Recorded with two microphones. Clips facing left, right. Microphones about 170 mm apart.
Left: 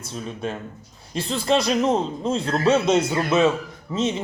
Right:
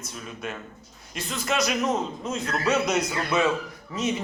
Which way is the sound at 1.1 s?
30° left (ahead or behind).